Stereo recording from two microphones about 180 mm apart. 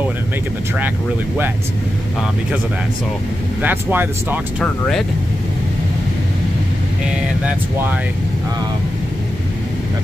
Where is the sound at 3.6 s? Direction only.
10° right (ahead or behind).